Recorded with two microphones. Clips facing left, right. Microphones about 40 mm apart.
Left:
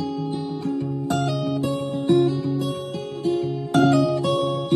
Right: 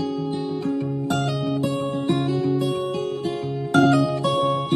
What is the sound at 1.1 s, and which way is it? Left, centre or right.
Music, centre.